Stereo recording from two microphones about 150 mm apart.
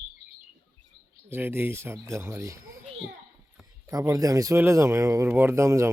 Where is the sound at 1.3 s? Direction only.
15° right (ahead or behind).